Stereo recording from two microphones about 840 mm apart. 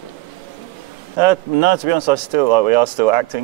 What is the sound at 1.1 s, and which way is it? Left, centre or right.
Speech, right.